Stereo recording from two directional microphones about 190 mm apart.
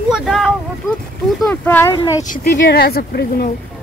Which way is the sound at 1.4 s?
10° left (ahead or behind).